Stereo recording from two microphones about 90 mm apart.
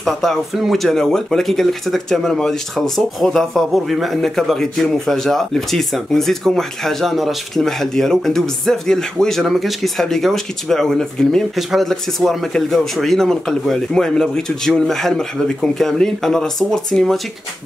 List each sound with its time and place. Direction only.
0.0 s speech: centre (ahead or behind)